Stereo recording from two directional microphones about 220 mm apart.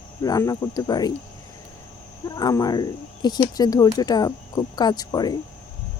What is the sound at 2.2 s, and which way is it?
Speech, 15° left (ahead or behind).